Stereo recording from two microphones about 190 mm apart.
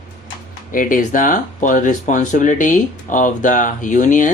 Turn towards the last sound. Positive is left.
turn(degrees=40)  # may be behind; listen again after turning